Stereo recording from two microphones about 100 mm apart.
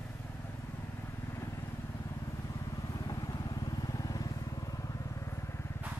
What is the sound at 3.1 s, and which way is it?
Vehicle, 40° left (ahead or behind).